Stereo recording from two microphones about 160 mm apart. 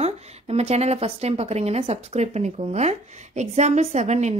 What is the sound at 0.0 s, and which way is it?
A woman's voice, 40° right (ahead or behind).